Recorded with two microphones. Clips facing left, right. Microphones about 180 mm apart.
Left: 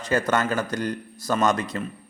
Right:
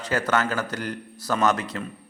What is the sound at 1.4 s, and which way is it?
Speech, 5° right (ahead or behind).